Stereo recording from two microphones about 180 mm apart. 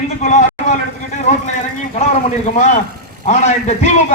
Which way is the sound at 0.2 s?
40° left (ahead or behind).